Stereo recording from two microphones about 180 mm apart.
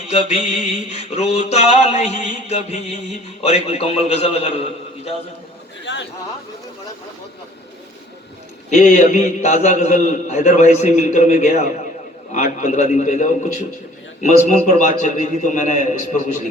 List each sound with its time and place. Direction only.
0.1 s a man's voice: 35° left (ahead or behind)
5.8 s a sound: 75° left (ahead or behind)
8.7 s a man's voice: 40° left (ahead or behind)